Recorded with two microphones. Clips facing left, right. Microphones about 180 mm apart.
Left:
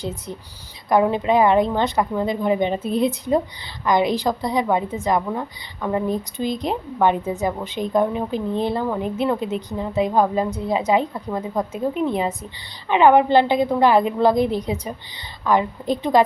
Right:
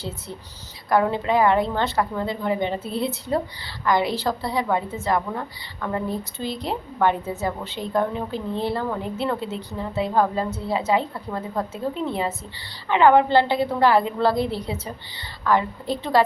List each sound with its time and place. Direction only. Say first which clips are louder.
0.0 s a woman's voice: left 4 dB; 15° left (ahead or behind)